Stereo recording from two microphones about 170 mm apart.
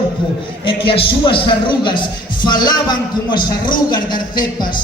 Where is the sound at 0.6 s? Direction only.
30° left (ahead or behind).